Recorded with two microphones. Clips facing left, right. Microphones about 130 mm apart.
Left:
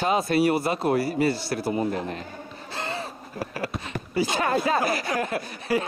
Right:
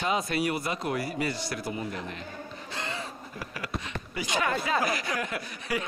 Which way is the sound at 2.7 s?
30° left (ahead or behind).